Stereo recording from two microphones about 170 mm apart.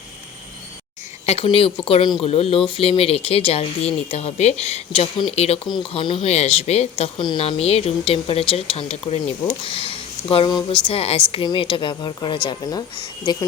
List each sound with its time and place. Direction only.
1.3 s a woman's voice: 35° left (ahead or behind)